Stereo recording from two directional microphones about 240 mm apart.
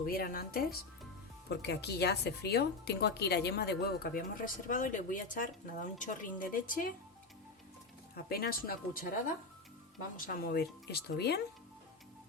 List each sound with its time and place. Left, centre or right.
0.0 s speech: left
8.1 s speech: left
10.2 s speech: left